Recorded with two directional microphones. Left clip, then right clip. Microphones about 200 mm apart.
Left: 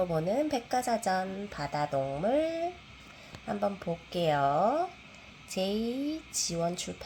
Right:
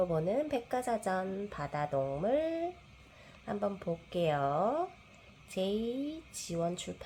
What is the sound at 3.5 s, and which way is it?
Speech, 10° right (ahead or behind).